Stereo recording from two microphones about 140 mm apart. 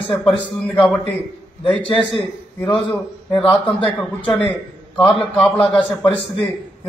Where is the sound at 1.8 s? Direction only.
35° left (ahead or behind).